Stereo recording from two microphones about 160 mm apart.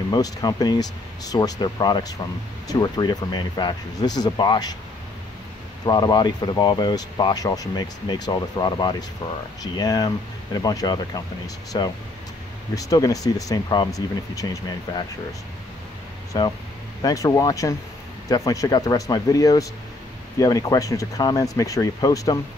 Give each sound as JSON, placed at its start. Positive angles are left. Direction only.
{"t": 0.1, "sound": "speech", "side_deg": 25}
{"t": 5.9, "sound": "speech", "side_deg": 30}
{"t": 16.3, "sound": "speech", "side_deg": 25}